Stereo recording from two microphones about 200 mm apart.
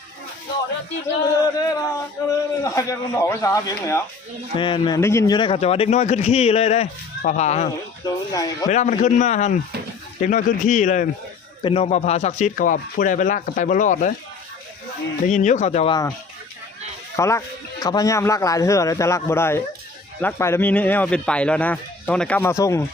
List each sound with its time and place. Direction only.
1.5 s a man's voice: 15° left (ahead or behind); by 7.7 s 35° left (ahead or behind)
8.0 s speech: 20° left (ahead or behind)
8.6 s speech: 35° left (ahead or behind)
15.3 s speech: 35° left (ahead or behind)
17.2 s speech: 15° left (ahead or behind)